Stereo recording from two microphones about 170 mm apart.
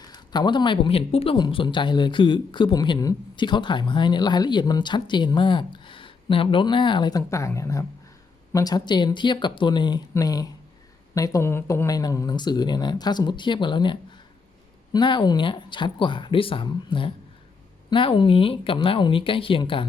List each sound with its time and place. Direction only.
0.1 s speech: 25° left (ahead or behind)